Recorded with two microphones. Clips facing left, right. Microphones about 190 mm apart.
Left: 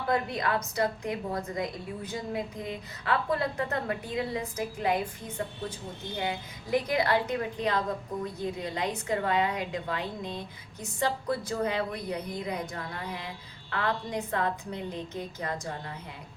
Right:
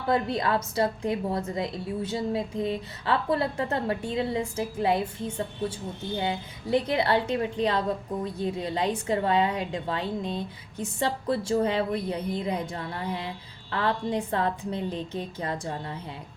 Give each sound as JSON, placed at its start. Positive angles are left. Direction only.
{"t": 0.1, "sound": "a woman's voice", "side_deg": -30}
{"t": 6.1, "sound": "a woman's voice", "side_deg": -30}